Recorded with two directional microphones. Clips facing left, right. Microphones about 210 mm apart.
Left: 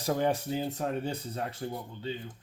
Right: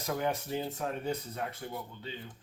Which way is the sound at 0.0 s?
30° left (ahead or behind).